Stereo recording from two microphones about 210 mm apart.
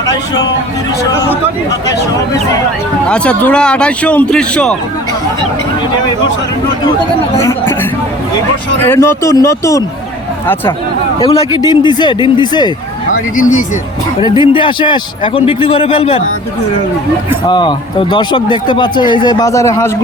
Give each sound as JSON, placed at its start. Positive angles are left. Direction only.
{"t": 3.1, "sound": "a man's voice", "side_deg": 5}
{"t": 8.8, "sound": "speech", "side_deg": 10}
{"t": 11.2, "sound": "speech", "side_deg": 25}
{"t": 13.1, "sound": "speech", "side_deg": 40}
{"t": 14.3, "sound": "speech", "side_deg": 25}
{"t": 17.4, "sound": "speech", "side_deg": 20}